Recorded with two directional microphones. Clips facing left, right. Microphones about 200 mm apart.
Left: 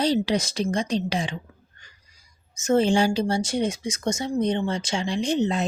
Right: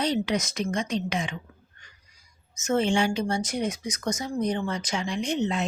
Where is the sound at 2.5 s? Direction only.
35° left (ahead or behind).